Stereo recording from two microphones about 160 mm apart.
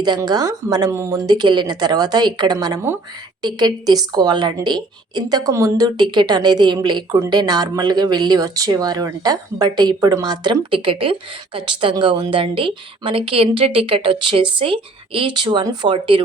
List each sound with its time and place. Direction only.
0.0 s a woman's voice: 25° right (ahead or behind)